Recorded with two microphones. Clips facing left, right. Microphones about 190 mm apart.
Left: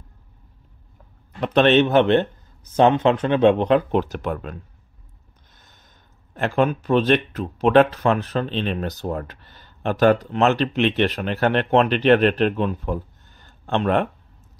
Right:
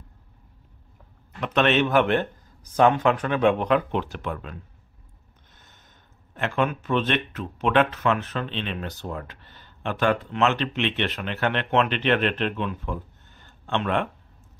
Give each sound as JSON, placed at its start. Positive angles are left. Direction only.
{"t": 1.4, "sound": "speech", "side_deg": 35}
{"t": 3.9, "sound": "speech", "side_deg": 40}
{"t": 5.5, "sound": "a sound", "side_deg": 35}
{"t": 6.3, "sound": "speech", "side_deg": 35}